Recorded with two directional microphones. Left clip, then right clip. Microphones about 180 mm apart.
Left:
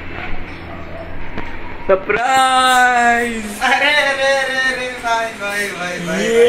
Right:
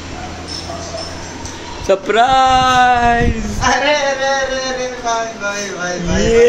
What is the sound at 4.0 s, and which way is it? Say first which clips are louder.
Speech: left 1 dB; centre (ahead or behind).